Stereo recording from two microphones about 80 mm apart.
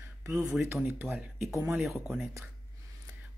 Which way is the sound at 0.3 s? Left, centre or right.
Centre.